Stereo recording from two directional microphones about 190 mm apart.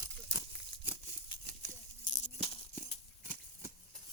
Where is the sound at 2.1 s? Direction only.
30° left (ahead or behind).